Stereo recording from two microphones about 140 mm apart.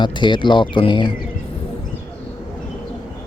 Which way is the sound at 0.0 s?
35° left (ahead or behind).